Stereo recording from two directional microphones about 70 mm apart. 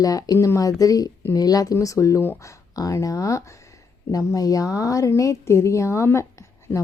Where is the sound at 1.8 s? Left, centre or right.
Left.